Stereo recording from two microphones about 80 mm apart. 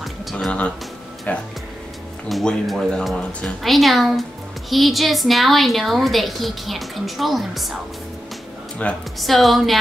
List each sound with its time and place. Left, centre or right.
0.0 s music: centre
0.5 s speech: centre
1.3 s music: centre
2.2 s a woman's voice: centre
8.8 s speech: centre
9.2 s a woman's voice: centre